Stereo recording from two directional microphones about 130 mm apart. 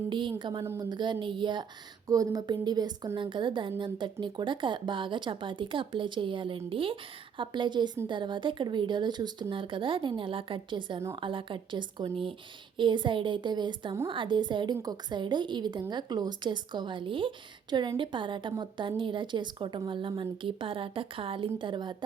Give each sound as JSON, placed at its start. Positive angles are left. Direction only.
{"t": 0.1, "sound": "speech", "side_deg": -35}